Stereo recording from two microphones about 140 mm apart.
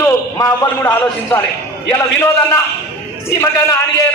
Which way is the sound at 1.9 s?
20° left (ahead or behind).